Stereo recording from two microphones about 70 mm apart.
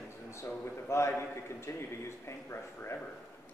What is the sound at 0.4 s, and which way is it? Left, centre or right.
A man's voice, left.